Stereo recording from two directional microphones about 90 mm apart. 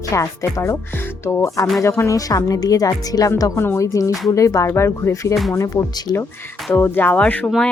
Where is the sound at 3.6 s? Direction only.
30° left (ahead or behind).